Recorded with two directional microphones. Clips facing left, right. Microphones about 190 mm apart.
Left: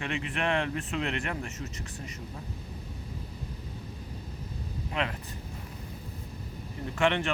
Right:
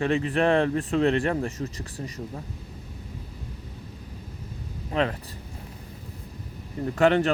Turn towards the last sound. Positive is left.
turn(degrees=-40)  # may be behind; listen again after turning